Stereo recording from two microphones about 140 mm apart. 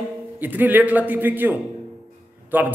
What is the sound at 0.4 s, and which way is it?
Speech, 10° right (ahead or behind).